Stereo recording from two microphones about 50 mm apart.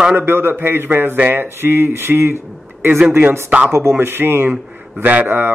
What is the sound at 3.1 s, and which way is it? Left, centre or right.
Speech, right.